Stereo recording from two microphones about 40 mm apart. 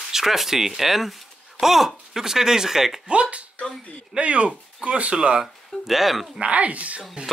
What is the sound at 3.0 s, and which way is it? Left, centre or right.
Speech, right.